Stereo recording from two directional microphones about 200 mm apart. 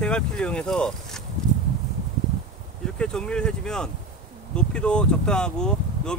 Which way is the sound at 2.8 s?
5° left (ahead or behind).